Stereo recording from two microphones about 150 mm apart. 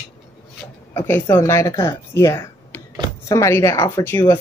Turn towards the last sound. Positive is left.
turn(degrees=15)  # may be behind; listen again after turning